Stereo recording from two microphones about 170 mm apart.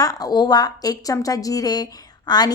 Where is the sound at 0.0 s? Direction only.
20° left (ahead or behind).